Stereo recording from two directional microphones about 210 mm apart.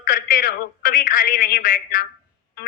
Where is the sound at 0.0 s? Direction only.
40° left (ahead or behind).